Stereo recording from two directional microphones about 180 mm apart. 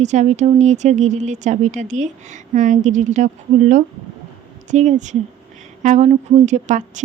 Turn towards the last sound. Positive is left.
turn(degrees=-40)  # may be behind; listen again after turning